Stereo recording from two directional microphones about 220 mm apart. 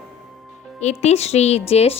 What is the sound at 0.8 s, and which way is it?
A woman's voice, 30° left (ahead or behind).